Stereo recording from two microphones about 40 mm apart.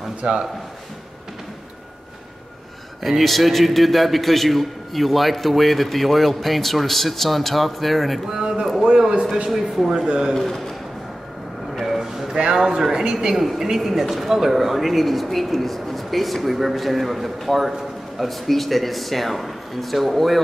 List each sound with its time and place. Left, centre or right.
0.2 s speech: right
3.0 s a man's voice: centre
8.3 s speech: centre
10.0 s speech: centre
10.3 s a man's voice: centre
11.8 s a sound: centre
12.5 s a man's voice: centre